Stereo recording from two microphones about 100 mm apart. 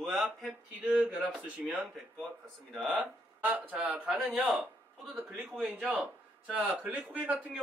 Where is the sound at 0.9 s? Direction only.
10° right (ahead or behind).